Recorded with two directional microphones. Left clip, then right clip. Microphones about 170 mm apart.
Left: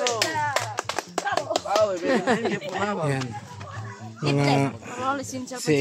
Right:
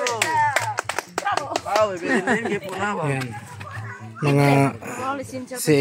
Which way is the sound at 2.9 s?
5° right (ahead or behind).